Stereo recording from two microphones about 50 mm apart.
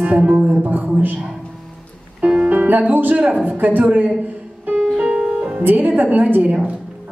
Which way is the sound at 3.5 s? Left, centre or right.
Right.